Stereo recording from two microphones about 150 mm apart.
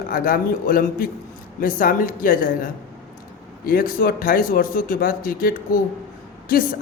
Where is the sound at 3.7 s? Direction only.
70° left (ahead or behind).